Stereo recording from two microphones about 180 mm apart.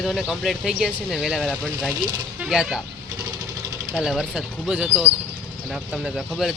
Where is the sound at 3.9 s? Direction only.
Centre (ahead or behind).